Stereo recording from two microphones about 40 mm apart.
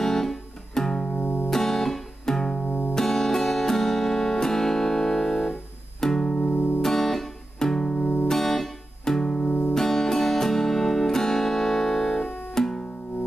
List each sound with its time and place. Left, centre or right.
0.0 s music: centre
1.2 s music: left
1.5 s music: centre